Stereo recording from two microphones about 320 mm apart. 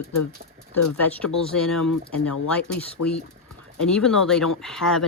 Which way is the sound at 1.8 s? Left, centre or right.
Left.